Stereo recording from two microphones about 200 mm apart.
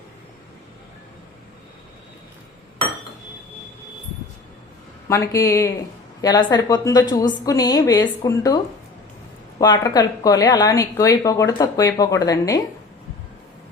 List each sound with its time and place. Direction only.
5.0 s a woman's voice: 15° left (ahead or behind)